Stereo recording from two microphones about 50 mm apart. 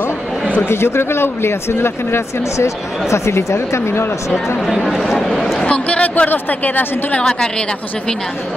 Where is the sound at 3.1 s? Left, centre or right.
Left.